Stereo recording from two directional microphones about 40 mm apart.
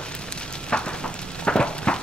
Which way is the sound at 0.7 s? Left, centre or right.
Left.